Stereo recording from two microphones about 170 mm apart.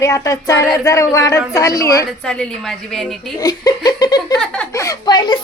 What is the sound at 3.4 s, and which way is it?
Speech, 20° left (ahead or behind).